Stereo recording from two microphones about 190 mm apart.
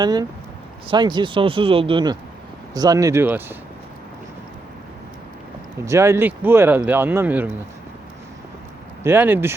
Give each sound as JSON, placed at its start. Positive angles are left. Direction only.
{"t": 0.0, "sound": "speech", "side_deg": -20}
{"t": 5.8, "sound": "speech", "side_deg": -15}
{"t": 9.0, "sound": "speech", "side_deg": -10}